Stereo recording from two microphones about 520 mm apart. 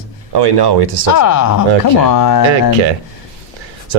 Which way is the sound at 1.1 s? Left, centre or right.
Left.